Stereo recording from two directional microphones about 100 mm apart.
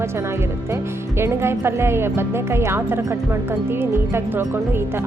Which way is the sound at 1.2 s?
25° right (ahead or behind).